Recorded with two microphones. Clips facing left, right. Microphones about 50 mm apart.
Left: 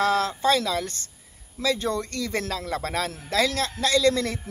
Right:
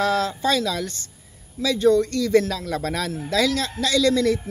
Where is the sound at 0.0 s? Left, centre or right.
Left.